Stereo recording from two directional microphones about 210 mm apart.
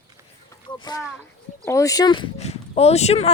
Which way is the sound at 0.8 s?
20° left (ahead or behind).